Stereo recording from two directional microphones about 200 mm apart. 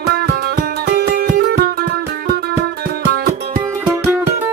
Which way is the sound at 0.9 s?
45° right (ahead or behind).